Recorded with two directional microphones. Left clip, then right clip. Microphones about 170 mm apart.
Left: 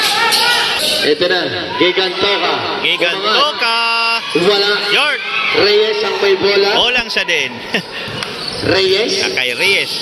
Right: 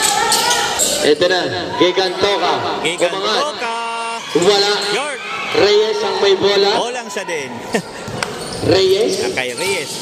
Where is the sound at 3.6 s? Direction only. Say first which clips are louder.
Left 7 dB; 10° right (ahead or behind).